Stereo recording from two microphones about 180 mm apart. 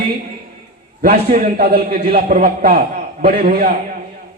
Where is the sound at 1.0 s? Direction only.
55° right (ahead or behind).